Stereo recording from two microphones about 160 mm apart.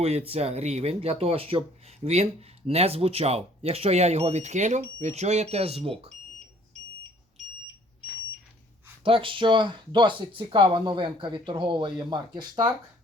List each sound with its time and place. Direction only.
0.0 s speech: 40° right (ahead or behind)
9.0 s speech: 35° right (ahead or behind)